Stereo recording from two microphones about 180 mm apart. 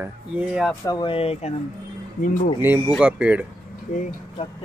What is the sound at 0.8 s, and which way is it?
Speech, 25° left (ahead or behind).